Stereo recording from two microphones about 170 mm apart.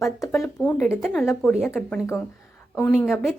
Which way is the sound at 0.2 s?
15° left (ahead or behind).